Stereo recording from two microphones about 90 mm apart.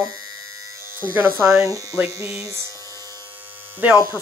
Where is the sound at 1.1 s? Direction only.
25° right (ahead or behind).